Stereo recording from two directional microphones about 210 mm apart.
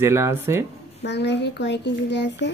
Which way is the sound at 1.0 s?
55° left (ahead or behind).